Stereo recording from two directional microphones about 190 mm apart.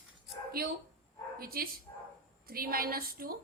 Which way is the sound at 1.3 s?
50° right (ahead or behind).